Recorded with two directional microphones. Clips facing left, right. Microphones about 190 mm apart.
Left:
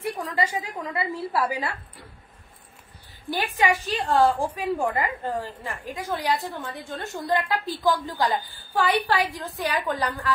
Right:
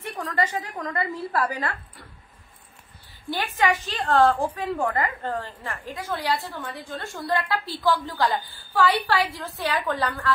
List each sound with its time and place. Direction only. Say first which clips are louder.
0.2 s a woman's voice: right 5 dB; 10° left (ahead or behind)
3.3 s a woman's voice: even; 15° left (ahead or behind)